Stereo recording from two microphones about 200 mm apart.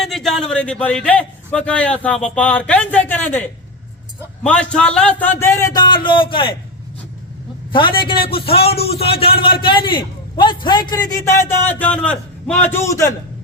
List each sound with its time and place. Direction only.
0.0 s a man's voice: centre (ahead or behind)
4.4 s a man's voice: 5° left (ahead or behind); by 6.6 s 25° left (ahead or behind)
7.7 s a man's voice: 25° left (ahead or behind)